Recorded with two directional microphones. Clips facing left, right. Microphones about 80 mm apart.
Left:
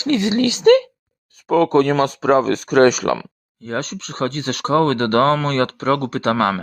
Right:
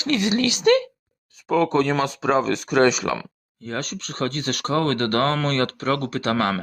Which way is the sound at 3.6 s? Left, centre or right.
Left.